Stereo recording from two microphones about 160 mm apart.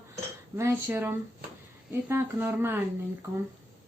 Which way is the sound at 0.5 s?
15° right (ahead or behind).